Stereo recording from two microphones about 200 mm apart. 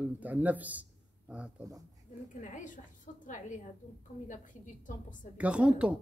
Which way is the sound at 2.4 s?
40° left (ahead or behind).